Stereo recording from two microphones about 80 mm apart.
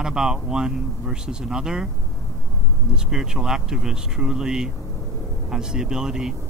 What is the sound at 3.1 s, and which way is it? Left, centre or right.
Speech, centre.